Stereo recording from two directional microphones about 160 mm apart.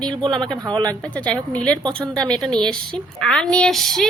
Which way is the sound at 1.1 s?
10° left (ahead or behind).